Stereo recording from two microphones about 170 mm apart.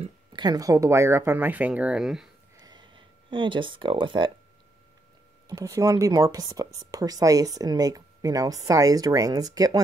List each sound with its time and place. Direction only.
0.0 s speech: 25° right (ahead or behind); by 2.2 s 5° right (ahead or behind)
2.5 s a sound: 25° right (ahead or behind)
5.5 s speech: 20° right (ahead or behind)